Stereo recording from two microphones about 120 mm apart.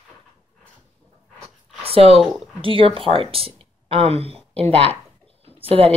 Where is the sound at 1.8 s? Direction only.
55° right (ahead or behind).